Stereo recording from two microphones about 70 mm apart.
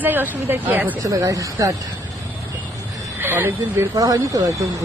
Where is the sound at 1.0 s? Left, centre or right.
Right.